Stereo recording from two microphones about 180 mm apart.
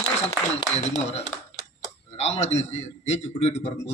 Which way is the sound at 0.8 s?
40° left (ahead or behind).